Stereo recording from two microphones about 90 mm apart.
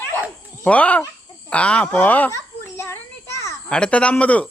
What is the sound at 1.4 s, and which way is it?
Speech, 10° left (ahead or behind).